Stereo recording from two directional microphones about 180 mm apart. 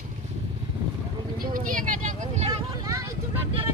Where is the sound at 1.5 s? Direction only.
50° right (ahead or behind).